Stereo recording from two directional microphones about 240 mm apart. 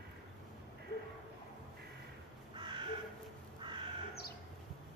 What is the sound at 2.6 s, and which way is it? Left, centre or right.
Crow, centre.